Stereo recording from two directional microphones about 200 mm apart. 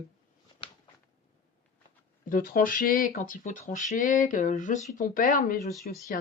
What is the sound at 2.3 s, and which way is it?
Speech, 40° left (ahead or behind).